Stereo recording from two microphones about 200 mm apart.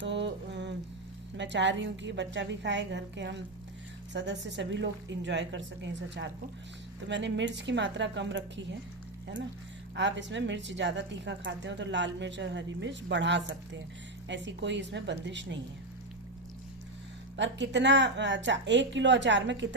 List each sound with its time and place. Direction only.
0.0 s mantra: 60° right (ahead or behind)
1.4 s a woman's voice: 60° right (ahead or behind)
9.9 s a woman's voice: 65° right (ahead or behind)
17.3 s a woman's voice: 65° right (ahead or behind)